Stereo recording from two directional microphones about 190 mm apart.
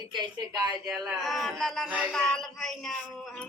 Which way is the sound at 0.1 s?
25° right (ahead or behind).